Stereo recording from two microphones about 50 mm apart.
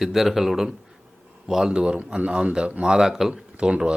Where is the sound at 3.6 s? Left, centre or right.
Centre.